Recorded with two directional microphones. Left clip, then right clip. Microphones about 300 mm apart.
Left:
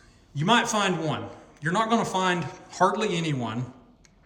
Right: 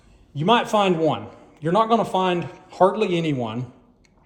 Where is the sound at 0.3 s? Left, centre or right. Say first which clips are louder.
Right 4 dB; centre.